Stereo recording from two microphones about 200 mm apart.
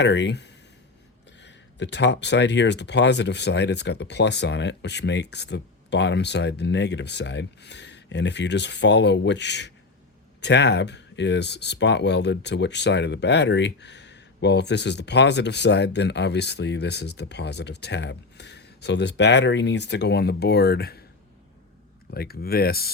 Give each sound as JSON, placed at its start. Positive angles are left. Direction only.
{"t": 0.0, "sound": "speech", "side_deg": 60}
{"t": 22.1, "sound": "speech", "side_deg": 50}